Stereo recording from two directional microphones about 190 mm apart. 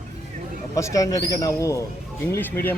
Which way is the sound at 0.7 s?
15° left (ahead or behind).